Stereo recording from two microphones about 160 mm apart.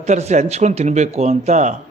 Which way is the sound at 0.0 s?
45° right (ahead or behind).